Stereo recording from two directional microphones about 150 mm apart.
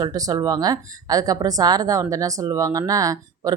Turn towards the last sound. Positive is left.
turn(degrees=-20)  # may be behind; listen again after turning